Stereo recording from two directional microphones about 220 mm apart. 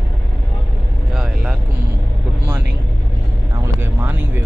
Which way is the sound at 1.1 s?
Centre (ahead or behind).